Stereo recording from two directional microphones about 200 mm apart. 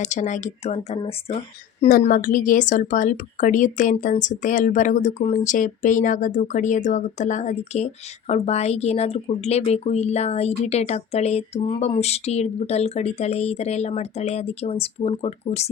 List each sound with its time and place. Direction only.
0.0 s speech: 35° left (ahead or behind)
1.9 s speech: 45° left (ahead or behind)